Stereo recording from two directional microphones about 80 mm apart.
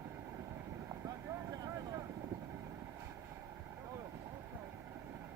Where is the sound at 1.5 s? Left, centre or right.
Right.